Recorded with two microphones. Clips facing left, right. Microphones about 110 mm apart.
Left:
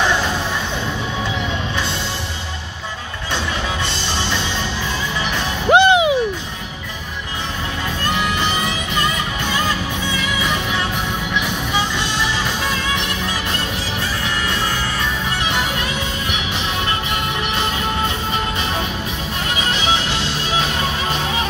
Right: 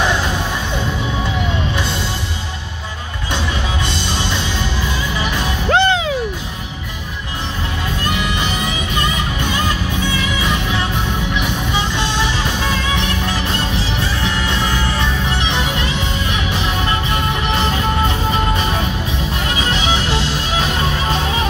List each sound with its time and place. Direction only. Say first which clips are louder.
5.7 s music: left 4 dB; 15° left (ahead or behind)